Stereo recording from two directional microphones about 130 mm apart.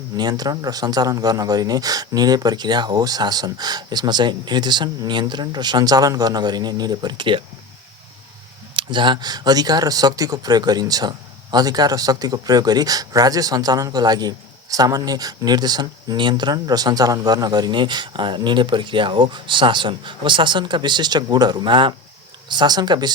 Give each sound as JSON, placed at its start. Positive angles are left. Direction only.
{"t": 0.2, "sound": "speech", "side_deg": -30}
{"t": 8.7, "sound": "speech", "side_deg": -35}